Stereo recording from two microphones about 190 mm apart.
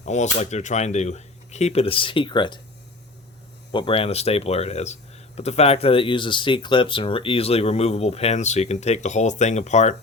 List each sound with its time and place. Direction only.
0.0 s speech: 40° left (ahead or behind)
3.7 s speech: 25° left (ahead or behind)